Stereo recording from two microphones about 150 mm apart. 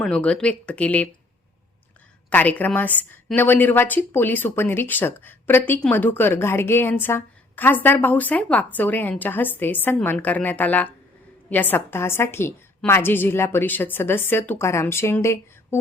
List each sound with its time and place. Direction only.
0.0 s a woman's voice: 5° left (ahead or behind)
2.3 s a woman's voice: 10° left (ahead or behind)